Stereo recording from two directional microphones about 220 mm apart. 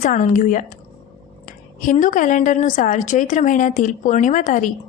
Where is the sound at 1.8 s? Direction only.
35° left (ahead or behind).